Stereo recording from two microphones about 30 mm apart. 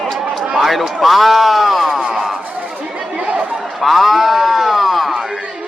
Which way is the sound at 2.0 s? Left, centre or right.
Centre.